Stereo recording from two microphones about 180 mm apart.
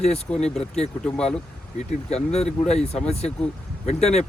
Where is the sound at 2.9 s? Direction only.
35° left (ahead or behind).